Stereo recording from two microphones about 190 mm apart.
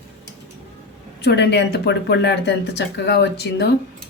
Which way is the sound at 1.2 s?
65° left (ahead or behind).